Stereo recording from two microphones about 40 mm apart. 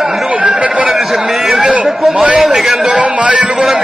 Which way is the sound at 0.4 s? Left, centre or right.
Right.